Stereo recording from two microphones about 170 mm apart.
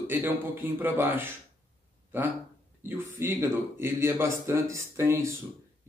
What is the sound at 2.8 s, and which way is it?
Speech, 15° right (ahead or behind).